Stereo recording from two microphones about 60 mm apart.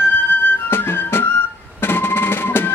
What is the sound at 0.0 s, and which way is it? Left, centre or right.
Flute, left.